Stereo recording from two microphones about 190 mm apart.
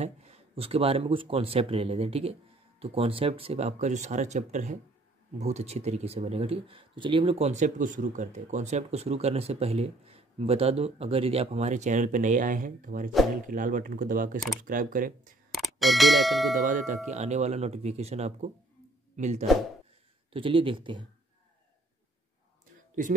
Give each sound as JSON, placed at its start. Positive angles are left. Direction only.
{"t": 0.0, "sound": "speech", "side_deg": -35}
{"t": 15.5, "sound": "speech", "side_deg": 0}
{"t": 16.5, "sound": "speech", "side_deg": -40}
{"t": 20.3, "sound": "speech", "side_deg": -25}